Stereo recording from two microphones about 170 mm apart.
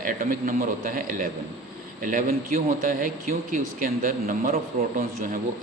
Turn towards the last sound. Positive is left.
turn(degrees=-55)  # may be behind; listen again after turning